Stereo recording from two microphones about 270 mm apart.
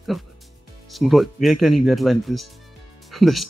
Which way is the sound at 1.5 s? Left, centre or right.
Left.